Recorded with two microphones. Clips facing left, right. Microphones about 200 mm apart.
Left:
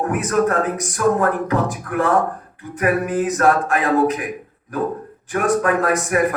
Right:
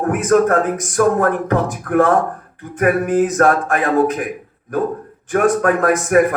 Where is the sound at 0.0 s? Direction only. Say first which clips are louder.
Right 4 dB; 50° right (ahead or behind).